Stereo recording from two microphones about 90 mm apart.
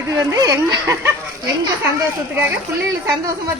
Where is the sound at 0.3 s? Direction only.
40° right (ahead or behind).